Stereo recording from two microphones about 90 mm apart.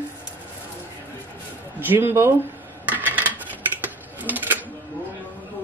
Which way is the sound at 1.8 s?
25° right (ahead or behind).